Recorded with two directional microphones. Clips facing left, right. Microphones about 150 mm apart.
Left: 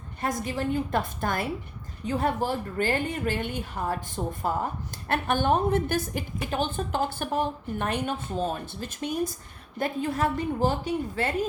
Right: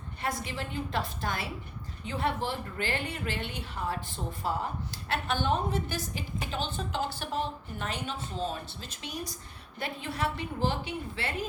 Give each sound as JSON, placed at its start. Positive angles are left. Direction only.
{"t": 0.2, "sound": "a woman's voice", "side_deg": 45}